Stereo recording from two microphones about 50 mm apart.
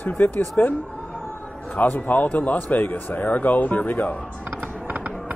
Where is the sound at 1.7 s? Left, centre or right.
Left.